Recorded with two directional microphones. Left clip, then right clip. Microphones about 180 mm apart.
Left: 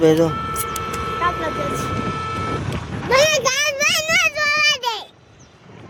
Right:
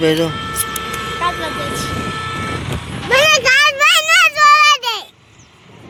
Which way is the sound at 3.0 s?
35° right (ahead or behind).